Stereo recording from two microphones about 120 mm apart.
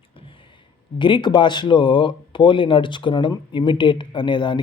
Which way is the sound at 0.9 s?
40° left (ahead or behind).